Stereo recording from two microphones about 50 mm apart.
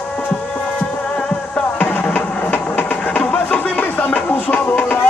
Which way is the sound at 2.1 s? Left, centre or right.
Left.